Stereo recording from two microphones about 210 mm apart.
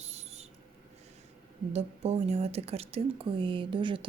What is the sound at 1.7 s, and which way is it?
Speech, 30° right (ahead or behind).